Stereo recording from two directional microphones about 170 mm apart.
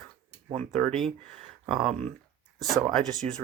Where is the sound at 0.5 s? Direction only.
45° right (ahead or behind).